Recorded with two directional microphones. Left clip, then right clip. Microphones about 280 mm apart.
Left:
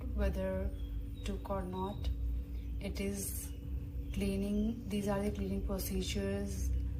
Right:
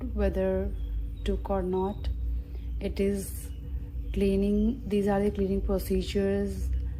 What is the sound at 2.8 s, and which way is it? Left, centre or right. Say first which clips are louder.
Speech: right 12 dB; right.